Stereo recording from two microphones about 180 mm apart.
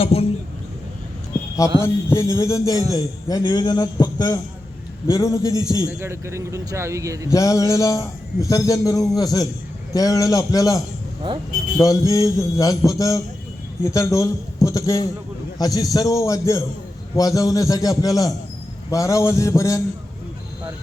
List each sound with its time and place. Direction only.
0.0 s a sound: 35° left (ahead or behind)
1.8 s mantra: 15° left (ahead or behind)
2.9 s a man's voice: 20° left (ahead or behind)
5.9 s a man's voice: 15° right (ahead or behind)
7.3 s a man's voice: 20° left (ahead or behind)
18.9 s mantra: 20° left (ahead or behind)